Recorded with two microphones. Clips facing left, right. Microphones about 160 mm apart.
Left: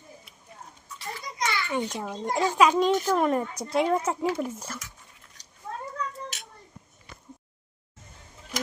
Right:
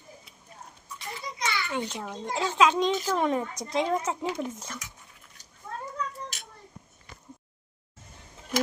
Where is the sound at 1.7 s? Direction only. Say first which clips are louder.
Left 3 dB; 10° left (ahead or behind).